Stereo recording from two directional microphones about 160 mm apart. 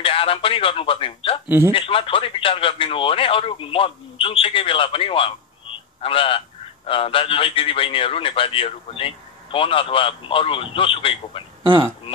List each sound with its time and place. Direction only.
0.0 s a man's voice: 35° left (ahead or behind)